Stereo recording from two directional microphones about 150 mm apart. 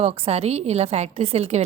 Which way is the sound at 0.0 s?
45° right (ahead or behind).